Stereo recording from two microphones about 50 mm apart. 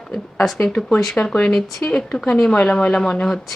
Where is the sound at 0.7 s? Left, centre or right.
Left.